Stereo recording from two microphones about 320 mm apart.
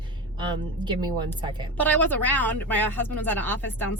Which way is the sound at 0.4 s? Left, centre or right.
Centre.